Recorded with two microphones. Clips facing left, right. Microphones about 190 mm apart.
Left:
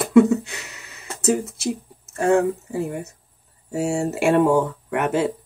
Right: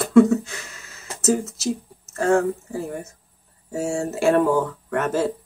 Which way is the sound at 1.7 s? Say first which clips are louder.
Right 1 dB; 15° left (ahead or behind).